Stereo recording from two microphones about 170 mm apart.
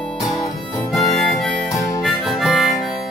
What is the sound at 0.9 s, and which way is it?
Harmonica, centre (ahead or behind).